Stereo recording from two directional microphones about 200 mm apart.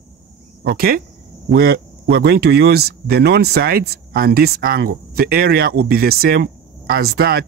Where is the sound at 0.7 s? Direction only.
50° right (ahead or behind).